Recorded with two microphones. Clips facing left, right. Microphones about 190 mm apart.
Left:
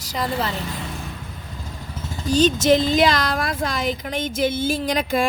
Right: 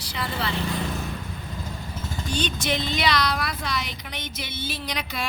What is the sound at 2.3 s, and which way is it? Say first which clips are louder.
Speech: left 11 dB; 40° left (ahead or behind).